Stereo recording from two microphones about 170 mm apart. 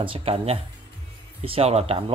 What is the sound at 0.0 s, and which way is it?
Speech, 35° right (ahead or behind).